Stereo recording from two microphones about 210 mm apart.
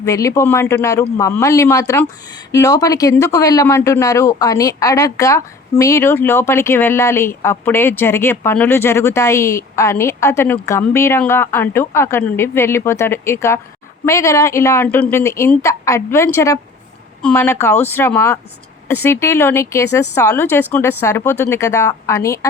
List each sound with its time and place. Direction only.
0.0 s speech: 15° left (ahead or behind)